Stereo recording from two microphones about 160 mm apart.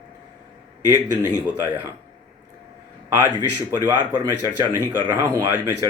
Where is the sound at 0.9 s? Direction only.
10° right (ahead or behind).